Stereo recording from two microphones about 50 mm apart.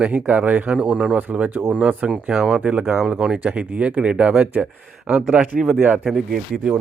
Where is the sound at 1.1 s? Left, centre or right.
Right; by 2.6 s centre.